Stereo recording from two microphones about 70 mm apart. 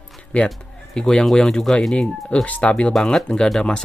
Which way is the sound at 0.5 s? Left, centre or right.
Centre.